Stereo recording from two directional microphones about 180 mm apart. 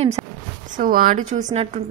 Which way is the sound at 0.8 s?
50° right (ahead or behind).